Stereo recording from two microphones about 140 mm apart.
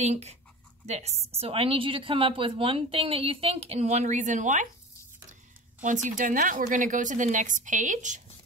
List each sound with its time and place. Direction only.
0.0 s a woman's voice: 50° right (ahead or behind)
5.9 s speech: 65° right (ahead or behind)